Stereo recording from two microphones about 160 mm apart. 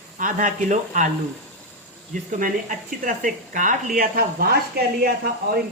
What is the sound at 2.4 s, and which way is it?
Speech, 55° right (ahead or behind).